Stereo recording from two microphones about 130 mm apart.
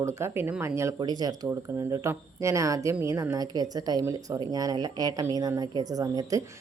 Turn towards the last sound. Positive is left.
turn(degrees=-25)  # may be behind; listen again after turning